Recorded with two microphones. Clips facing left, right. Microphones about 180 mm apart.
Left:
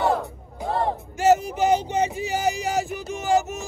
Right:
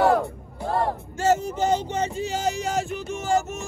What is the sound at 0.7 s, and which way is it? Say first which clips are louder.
Music: even; 15° left (ahead or behind).